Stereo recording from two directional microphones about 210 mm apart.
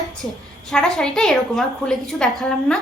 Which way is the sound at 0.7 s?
Centre (ahead or behind).